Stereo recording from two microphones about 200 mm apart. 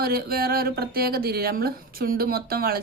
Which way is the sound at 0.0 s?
50° right (ahead or behind).